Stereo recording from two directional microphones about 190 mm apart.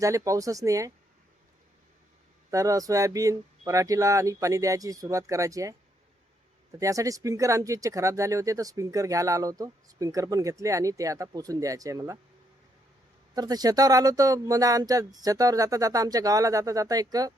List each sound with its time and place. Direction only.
0.0 s speech: 15° right (ahead or behind)
2.5 s speech: 15° right (ahead or behind)
6.7 s speech: 15° right (ahead or behind)
13.3 s speech: 20° right (ahead or behind)